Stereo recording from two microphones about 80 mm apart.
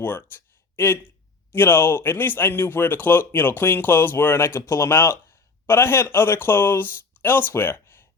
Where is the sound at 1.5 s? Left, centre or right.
Left.